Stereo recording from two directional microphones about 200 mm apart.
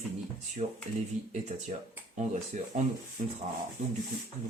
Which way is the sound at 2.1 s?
35° right (ahead or behind).